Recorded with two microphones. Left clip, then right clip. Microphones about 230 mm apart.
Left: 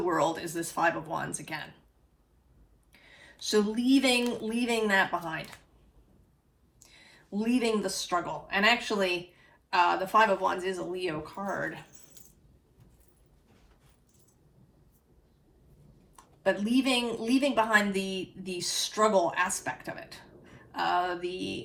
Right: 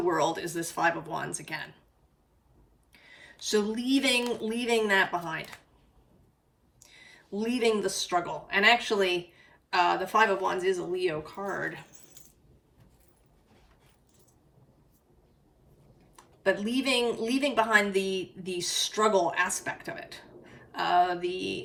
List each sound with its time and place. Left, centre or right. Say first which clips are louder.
0.1 s a woman's voice: right 1 dB; centre
3.7 s a woman's voice: left 1 dB; centre
6.9 s a woman's voice: right 1 dB; centre
10.1 s a woman's voice: left 1 dB; centre
11.4 s keys jangling: left 1 dB; centre
16.1 s a woman's voice: right 1 dB; centre